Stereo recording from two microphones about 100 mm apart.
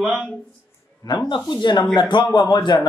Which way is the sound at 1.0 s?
45° left (ahead or behind).